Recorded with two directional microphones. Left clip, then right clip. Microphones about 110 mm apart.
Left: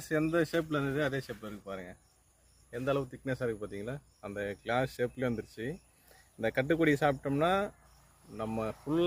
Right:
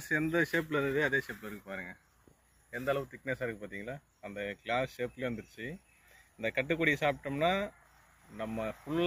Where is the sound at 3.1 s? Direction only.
50° left (ahead or behind).